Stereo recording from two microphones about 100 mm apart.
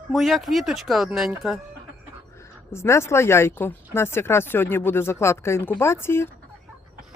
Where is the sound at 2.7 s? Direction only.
25° left (ahead or behind).